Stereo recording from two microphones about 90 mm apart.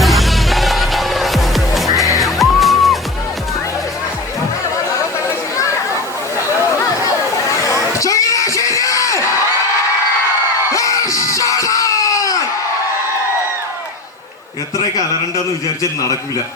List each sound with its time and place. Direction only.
0.0 s music: centre (ahead or behind)
7.7 s music: 35° left (ahead or behind)
10.7 s music: 35° left (ahead or behind)
15.8 s a man's voice: 40° left (ahead or behind)